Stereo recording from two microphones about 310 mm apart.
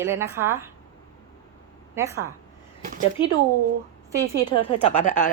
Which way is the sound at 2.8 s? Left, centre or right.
Right.